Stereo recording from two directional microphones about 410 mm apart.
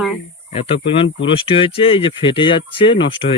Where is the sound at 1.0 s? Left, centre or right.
Centre.